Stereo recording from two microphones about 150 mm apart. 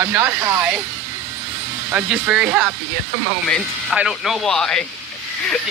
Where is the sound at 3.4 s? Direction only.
5° left (ahead or behind).